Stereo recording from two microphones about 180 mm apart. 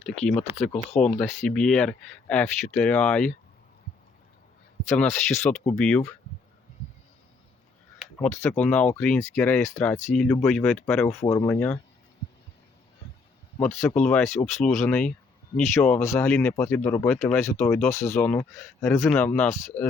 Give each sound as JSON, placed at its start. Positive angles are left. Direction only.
{"t": 0.4, "sound": "speech", "side_deg": 35}
{"t": 1.1, "sound": "speech", "side_deg": 10}
{"t": 4.9, "sound": "speech", "side_deg": 10}
{"t": 8.2, "sound": "speech", "side_deg": 15}
{"t": 13.6, "sound": "speech", "side_deg": 10}